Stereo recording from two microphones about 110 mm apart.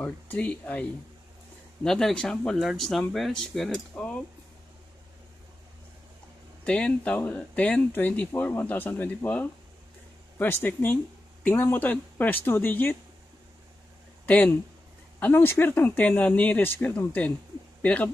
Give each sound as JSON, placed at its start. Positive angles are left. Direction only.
{"t": 0.0, "sound": "speech", "side_deg": 15}
{"t": 1.9, "sound": "speech", "side_deg": 5}
{"t": 6.6, "sound": "speech", "side_deg": 10}
{"t": 14.2, "sound": "speech", "side_deg": 15}